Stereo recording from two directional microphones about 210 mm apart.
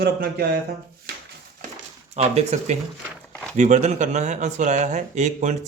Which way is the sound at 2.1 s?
30° right (ahead or behind).